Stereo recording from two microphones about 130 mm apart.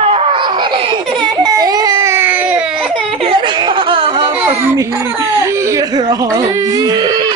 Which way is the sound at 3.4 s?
35° right (ahead or behind).